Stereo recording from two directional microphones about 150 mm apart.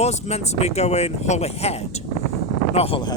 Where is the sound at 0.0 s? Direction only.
45° left (ahead or behind).